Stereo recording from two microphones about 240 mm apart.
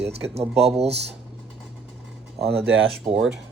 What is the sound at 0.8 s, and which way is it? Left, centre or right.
Speech, right.